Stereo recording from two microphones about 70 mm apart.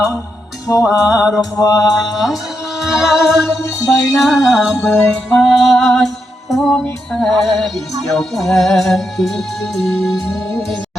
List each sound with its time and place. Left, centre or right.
0.7 s music: left
2.2 s music: centre